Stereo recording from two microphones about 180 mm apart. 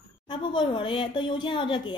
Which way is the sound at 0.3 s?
25° left (ahead or behind).